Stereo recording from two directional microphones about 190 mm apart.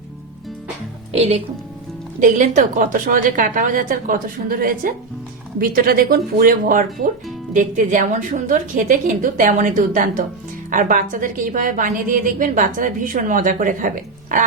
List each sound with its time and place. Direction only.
1.1 s a woman's voice: 35° right (ahead or behind)